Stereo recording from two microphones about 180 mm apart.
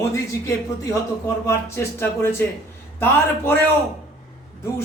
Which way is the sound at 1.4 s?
15° left (ahead or behind).